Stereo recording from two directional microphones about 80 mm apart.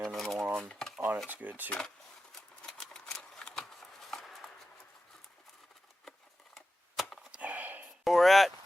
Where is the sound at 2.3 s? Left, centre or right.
Centre.